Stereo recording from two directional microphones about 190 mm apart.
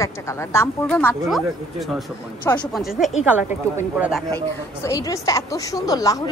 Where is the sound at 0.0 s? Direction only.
15° left (ahead or behind); by 4.2 s 10° right (ahead or behind).